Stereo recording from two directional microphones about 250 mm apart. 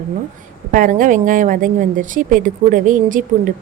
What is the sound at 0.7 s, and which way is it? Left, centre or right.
A woman's voice, right.